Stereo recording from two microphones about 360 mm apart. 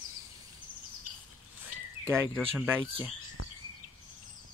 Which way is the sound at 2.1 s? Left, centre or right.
Centre.